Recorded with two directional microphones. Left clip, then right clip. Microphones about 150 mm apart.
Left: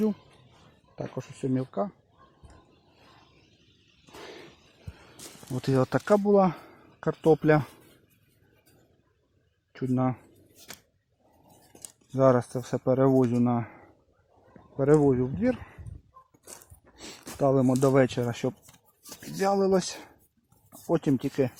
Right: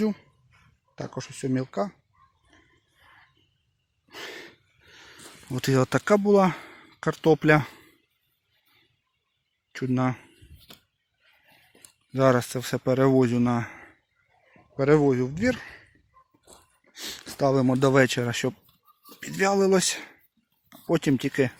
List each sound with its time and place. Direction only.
1.2 s speech: 10° right (ahead or behind)
4.1 s a sound: 10° right (ahead or behind)
5.5 s speech: 15° right (ahead or behind)
9.7 s speech: 15° right (ahead or behind)
12.5 s speech: 15° right (ahead or behind)
16.9 s speech: 5° right (ahead or behind)